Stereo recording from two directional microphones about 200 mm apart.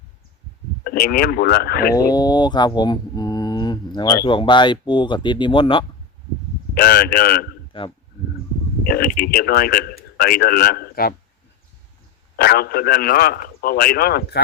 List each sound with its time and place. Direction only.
0.9 s a man's voice: 45° left (ahead or behind)
2.0 s speech: 20° left (ahead or behind)
6.7 s a man's voice: 50° left (ahead or behind)
7.7 s speech: 25° left (ahead or behind)
8.8 s a man's voice: 50° left (ahead or behind)
12.4 s a man's voice: 50° left (ahead or behind)